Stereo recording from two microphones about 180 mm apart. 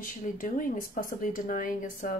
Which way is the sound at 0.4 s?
50° left (ahead or behind).